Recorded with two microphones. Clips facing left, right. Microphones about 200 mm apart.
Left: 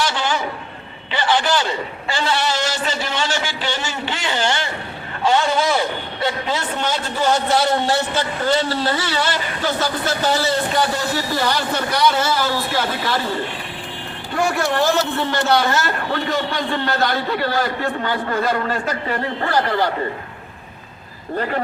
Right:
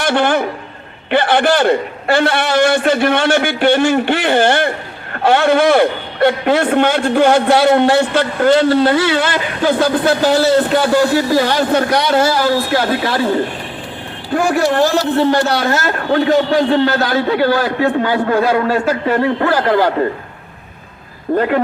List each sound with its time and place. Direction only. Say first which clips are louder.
0.0 s a man's voice: right 7 dB; 55° right (ahead or behind)
14.8 s speech: right 6 dB; 40° right (ahead or behind)
15.7 s a man's voice: right 6 dB; 60° right (ahead or behind)
21.3 s speech: right 9 dB; 50° right (ahead or behind)